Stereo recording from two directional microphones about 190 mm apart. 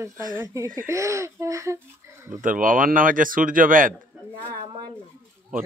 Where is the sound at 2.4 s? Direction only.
45° right (ahead or behind).